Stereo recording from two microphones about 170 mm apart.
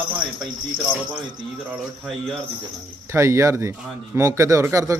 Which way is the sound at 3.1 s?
15° right (ahead or behind).